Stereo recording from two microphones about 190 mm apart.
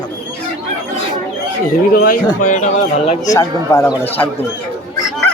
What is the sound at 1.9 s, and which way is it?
Speech, 50° left (ahead or behind).